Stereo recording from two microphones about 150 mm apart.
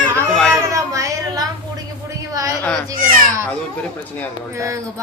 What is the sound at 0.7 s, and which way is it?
Speech, 20° right (ahead or behind).